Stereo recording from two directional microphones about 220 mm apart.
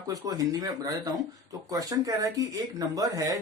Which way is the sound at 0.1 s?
15° right (ahead or behind).